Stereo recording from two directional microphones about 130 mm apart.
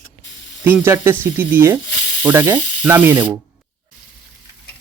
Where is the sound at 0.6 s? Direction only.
15° right (ahead or behind).